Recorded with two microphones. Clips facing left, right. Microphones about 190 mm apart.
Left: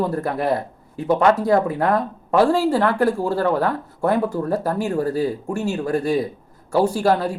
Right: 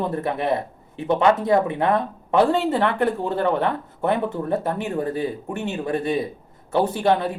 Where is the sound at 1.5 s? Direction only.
25° right (ahead or behind).